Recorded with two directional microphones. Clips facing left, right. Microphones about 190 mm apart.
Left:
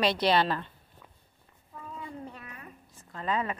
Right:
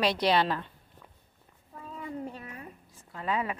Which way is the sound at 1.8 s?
25° right (ahead or behind).